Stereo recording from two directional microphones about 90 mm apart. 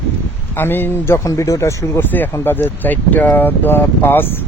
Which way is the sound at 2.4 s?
25° left (ahead or behind).